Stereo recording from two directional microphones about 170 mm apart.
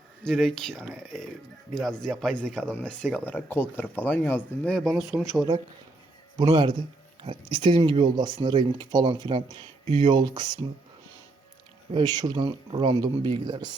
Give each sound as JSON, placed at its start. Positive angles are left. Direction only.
{"t": 0.3, "sound": "speech", "side_deg": 0}
{"t": 6.5, "sound": "speech", "side_deg": -25}
{"t": 11.9, "sound": "speech", "side_deg": -25}